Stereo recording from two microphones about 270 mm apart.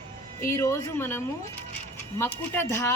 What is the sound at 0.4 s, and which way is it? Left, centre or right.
A woman's voice, centre.